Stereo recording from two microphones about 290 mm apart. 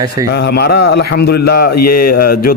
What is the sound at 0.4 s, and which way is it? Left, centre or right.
A man's voice, left.